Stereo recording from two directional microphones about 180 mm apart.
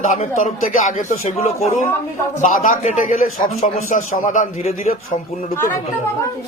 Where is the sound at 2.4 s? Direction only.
45° left (ahead or behind).